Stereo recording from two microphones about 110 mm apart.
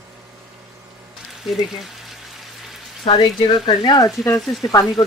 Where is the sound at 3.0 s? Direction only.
50° left (ahead or behind).